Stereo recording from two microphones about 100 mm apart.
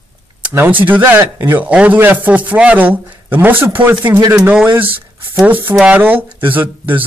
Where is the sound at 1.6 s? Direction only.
15° right (ahead or behind).